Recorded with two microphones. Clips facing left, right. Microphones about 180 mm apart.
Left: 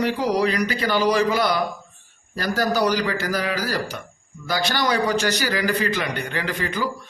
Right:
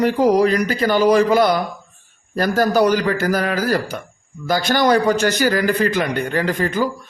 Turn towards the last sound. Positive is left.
turn(degrees=-45)  # may be behind; listen again after turning